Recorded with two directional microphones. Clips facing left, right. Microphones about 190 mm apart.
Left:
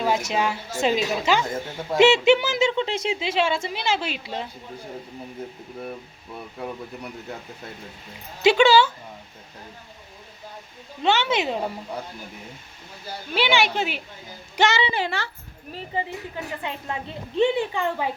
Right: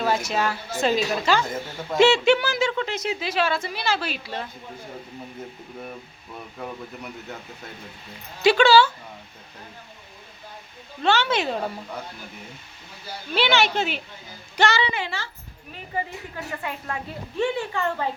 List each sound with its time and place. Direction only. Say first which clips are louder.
0.3 s speech: left 1 dB; 15° left (ahead or behind)
8.4 s speech: even; 20° left (ahead or behind)
11.0 s speech: even; 20° left (ahead or behind)
13.3 s speech: even; 10° left (ahead or behind)
15.1 s a child's voice: left 4 dB; 65° left (ahead or behind)
16.0 s speech: left 1 dB; 20° left (ahead or behind)